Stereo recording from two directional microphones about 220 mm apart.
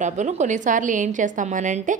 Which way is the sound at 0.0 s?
35° right (ahead or behind).